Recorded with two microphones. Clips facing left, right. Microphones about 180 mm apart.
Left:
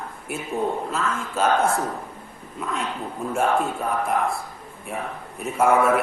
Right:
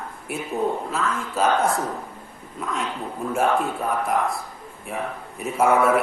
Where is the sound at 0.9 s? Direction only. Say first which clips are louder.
Even; centre (ahead or behind).